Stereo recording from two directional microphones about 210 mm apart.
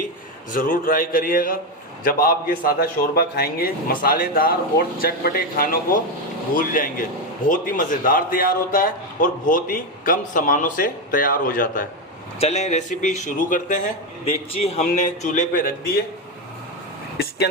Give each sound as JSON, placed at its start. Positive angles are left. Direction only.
{"t": 0.5, "sound": "a man's voice", "side_deg": 40}
{"t": 17.2, "sound": "speech", "side_deg": 50}